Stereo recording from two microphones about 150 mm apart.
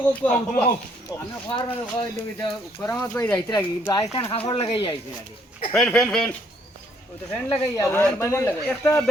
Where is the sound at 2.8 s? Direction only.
15° left (ahead or behind).